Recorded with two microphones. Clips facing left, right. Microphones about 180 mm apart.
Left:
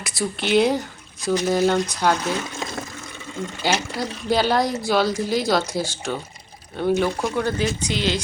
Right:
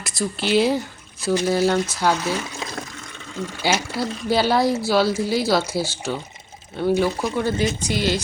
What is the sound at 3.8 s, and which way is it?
Speech, 15° left (ahead or behind).